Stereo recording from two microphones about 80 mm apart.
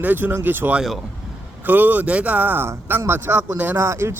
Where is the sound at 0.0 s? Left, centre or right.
Right.